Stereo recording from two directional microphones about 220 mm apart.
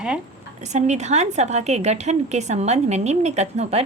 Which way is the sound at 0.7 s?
30° right (ahead or behind).